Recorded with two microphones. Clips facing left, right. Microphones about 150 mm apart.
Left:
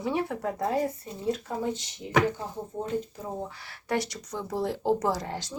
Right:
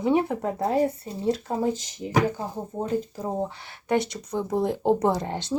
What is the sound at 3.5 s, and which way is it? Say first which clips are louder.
Speech: right 5 dB; 20° right (ahead or behind).